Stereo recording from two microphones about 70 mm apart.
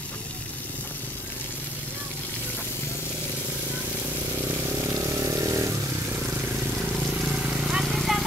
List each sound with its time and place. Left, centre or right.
4.8 s vehicle: right
7.2 s vehicle: centre